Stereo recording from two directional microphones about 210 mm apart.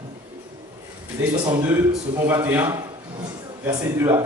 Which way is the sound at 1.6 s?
10° right (ahead or behind).